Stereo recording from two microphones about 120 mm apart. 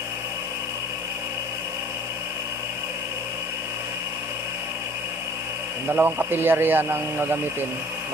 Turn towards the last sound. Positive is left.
turn(degrees=-20)  # may be behind; listen again after turning